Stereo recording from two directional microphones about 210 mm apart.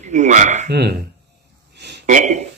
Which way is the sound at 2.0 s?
35° right (ahead or behind).